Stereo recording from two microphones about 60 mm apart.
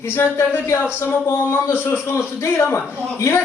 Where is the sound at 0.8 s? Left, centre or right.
Left.